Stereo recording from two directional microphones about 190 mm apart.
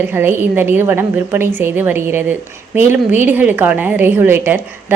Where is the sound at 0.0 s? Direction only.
10° right (ahead or behind).